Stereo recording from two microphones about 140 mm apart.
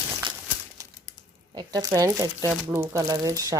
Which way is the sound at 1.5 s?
25° right (ahead or behind).